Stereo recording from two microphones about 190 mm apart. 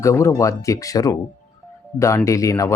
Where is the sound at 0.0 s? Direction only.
15° left (ahead or behind).